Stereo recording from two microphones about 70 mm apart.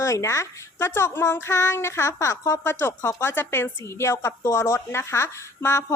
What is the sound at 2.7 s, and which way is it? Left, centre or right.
A woman's voice, left.